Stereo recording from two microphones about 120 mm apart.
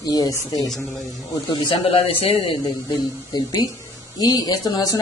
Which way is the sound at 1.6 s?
50° left (ahead or behind).